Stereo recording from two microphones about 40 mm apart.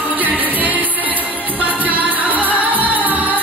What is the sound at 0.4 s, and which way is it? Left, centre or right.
Music, right.